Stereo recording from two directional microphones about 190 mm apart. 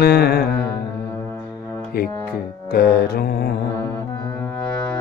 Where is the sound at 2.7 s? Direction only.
55° left (ahead or behind).